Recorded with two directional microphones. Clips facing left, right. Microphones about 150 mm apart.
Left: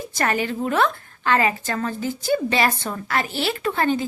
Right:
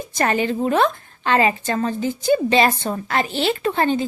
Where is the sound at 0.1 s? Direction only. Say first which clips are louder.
Right 4 dB; 20° right (ahead or behind).